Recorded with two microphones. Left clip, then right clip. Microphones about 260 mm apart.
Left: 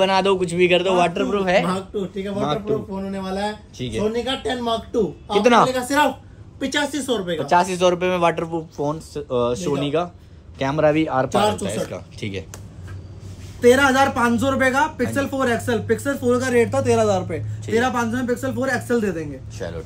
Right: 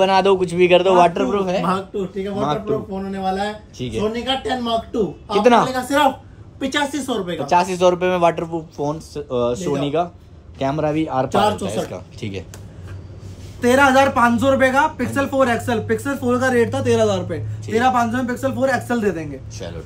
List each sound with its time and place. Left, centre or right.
0.0 s speech: centre
3.1 s speech: right
3.7 s speech: centre
13.6 s speech: centre
16.7 s speech: right
17.6 s speech: centre